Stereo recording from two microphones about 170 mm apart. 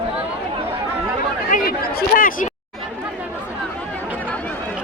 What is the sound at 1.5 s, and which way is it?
Speech, 60° left (ahead or behind).